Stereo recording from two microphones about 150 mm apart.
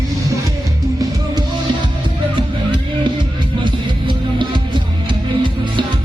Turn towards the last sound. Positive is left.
turn(degrees=-30)  # may be behind; listen again after turning